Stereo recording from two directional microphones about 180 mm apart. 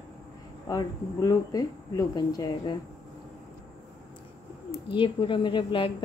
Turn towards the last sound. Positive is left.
turn(degrees=25)  # may be behind; listen again after turning